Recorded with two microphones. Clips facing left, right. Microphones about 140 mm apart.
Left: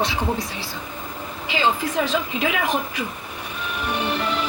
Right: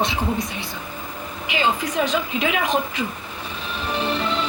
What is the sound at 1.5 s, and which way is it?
A woman's voice, 20° right (ahead or behind).